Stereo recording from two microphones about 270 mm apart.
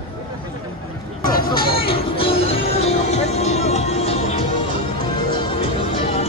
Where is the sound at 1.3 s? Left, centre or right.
Left.